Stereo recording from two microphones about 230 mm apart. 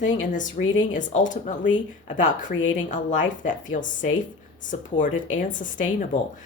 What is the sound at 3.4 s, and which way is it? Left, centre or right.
Speech, left.